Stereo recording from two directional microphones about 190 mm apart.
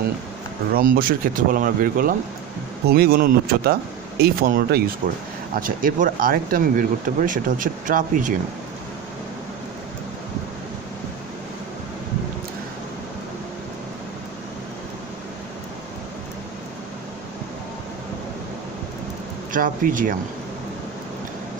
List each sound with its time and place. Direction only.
0.7 s speech: 50° right (ahead or behind)
19.5 s speech: 45° right (ahead or behind)